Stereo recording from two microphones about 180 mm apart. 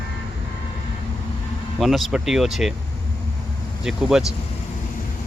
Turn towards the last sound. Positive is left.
turn(degrees=-5)  # may be behind; listen again after turning